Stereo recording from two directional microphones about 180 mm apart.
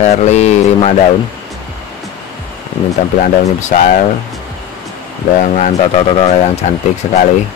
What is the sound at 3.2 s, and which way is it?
Speech, 40° left (ahead or behind).